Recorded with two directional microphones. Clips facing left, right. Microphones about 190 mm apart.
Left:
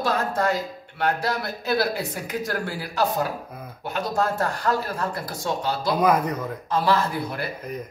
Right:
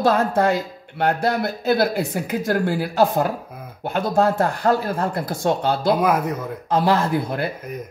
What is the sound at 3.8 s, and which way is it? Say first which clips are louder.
Speech: right 6 dB; 55° right (ahead or behind).